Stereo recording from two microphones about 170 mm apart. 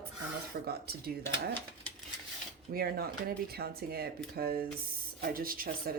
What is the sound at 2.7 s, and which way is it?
Speech, 65° right (ahead or behind).